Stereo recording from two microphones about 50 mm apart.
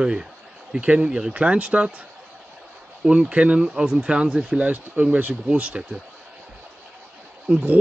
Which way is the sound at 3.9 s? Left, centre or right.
Right.